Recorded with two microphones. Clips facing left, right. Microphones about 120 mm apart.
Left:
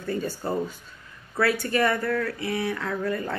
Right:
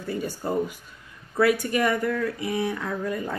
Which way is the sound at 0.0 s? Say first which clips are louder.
Left 1 dB; 10° right (ahead or behind).